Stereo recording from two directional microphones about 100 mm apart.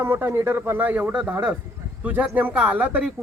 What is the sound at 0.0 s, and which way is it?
Speech, 20° right (ahead or behind).